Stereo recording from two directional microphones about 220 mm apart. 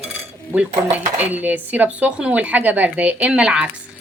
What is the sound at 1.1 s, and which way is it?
A woman's voice, 5° right (ahead or behind).